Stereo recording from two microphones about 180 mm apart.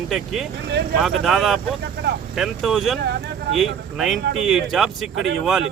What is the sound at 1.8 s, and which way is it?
Speech, 65° right (ahead or behind).